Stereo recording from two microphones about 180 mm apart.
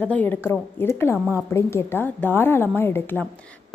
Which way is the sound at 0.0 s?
10° left (ahead or behind).